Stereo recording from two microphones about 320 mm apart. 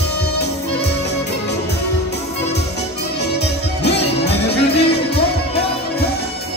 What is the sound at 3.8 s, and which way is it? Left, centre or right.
Music, left.